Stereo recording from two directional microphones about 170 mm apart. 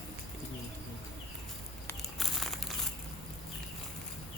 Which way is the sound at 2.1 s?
Centre (ahead or behind).